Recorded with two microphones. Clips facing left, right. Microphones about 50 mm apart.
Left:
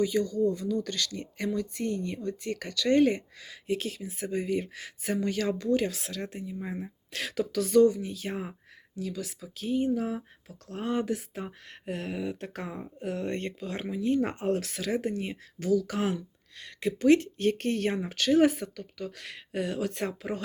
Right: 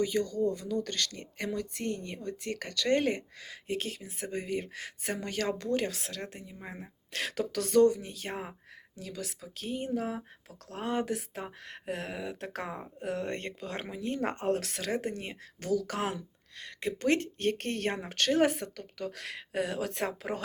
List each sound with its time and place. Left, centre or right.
0.0 s speech: right
5.9 s speech: right
7.5 s speech: right
9.9 s speech: right
10.7 s speech: right
11.4 s speech: right
13.0 s speech: right
16.6 s speech: right